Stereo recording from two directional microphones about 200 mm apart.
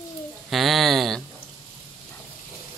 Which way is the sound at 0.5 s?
Centre (ahead or behind).